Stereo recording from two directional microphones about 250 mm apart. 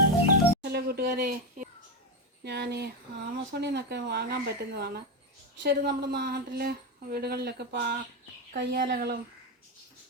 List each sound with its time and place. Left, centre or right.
0.6 s speech: right